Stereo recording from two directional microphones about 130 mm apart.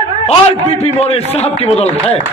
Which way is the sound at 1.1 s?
50° left (ahead or behind).